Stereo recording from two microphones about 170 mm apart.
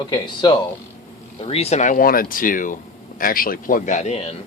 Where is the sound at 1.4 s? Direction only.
35° left (ahead or behind).